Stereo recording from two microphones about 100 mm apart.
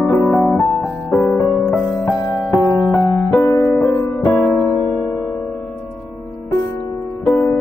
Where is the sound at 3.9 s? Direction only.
20° left (ahead or behind).